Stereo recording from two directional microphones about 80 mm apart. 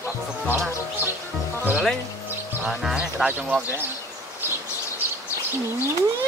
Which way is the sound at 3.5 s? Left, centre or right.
Right.